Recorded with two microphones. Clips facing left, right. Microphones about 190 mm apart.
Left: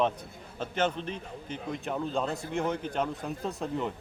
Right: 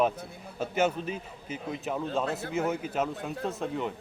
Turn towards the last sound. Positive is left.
turn(degrees=0)  # may be behind; listen again after turning